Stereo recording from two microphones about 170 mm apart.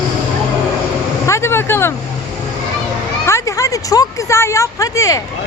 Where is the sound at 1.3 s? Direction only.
15° left (ahead or behind).